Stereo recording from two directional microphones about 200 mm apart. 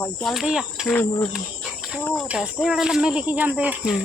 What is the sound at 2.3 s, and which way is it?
Speech, 5° right (ahead or behind).